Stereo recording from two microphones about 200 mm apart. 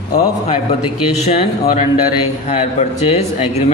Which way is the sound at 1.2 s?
30° left (ahead or behind).